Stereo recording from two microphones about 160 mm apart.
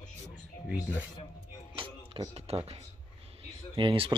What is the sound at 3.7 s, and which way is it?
Speech, 35° right (ahead or behind).